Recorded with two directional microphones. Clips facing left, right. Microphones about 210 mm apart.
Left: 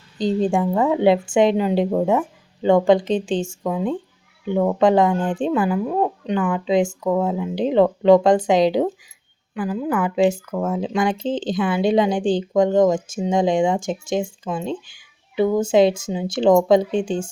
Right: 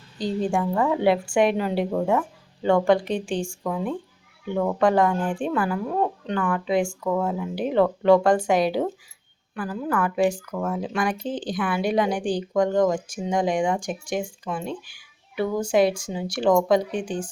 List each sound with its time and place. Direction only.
0.2 s speech: 20° left (ahead or behind)